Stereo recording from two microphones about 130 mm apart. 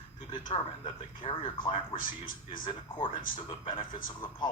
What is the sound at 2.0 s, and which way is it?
Speech, 90° left.